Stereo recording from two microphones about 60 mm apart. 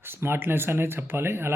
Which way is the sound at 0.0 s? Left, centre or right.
Right.